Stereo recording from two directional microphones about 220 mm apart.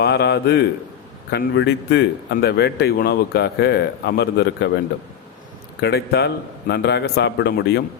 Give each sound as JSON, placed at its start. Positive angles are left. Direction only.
{"t": 0.0, "sound": "a man's voice", "side_deg": 50}
{"t": 5.8, "sound": "a man's voice", "side_deg": 50}